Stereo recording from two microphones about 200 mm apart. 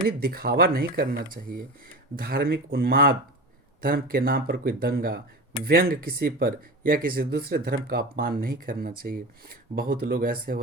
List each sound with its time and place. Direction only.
0.2 s speech: 50° right (ahead or behind)